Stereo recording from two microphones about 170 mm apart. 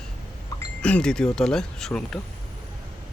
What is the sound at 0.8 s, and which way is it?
Speech, 5° left (ahead or behind).